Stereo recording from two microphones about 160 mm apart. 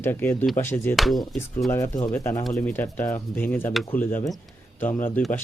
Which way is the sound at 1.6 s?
20° left (ahead or behind).